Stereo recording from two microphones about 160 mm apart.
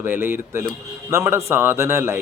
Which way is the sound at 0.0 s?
15° right (ahead or behind).